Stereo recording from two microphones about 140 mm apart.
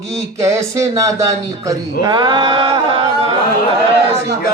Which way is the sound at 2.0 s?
30° right (ahead or behind).